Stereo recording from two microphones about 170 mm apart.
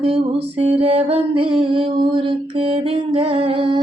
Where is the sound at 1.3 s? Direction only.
30° right (ahead or behind).